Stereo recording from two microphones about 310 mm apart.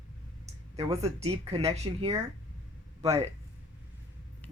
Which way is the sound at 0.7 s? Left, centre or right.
Centre.